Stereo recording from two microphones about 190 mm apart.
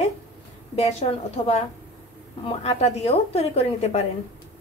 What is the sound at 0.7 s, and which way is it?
A woman's voice, 35° left (ahead or behind).